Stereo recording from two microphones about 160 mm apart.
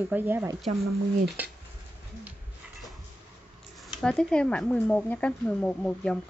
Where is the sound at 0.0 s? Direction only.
15° right (ahead or behind).